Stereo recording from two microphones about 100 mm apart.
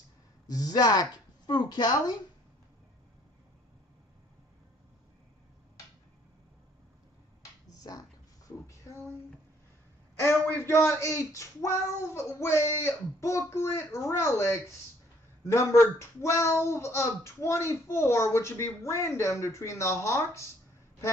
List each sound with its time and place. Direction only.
0.5 s speech: 40° left (ahead or behind)
7.8 s a sound: 35° left (ahead or behind)
10.1 s speech: 25° left (ahead or behind)